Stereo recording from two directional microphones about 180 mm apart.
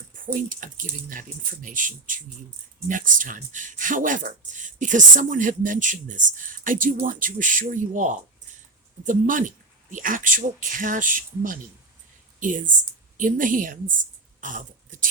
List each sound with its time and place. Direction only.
0.3 s speech: 45° right (ahead or behind)